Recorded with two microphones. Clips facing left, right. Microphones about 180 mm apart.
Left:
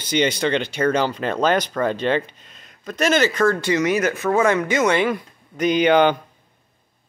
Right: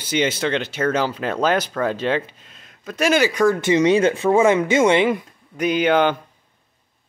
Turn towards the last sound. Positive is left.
turn(degrees=0)  # may be behind; listen again after turning